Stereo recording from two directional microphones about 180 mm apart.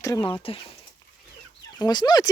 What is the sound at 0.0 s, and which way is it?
Speech, 20° left (ahead or behind).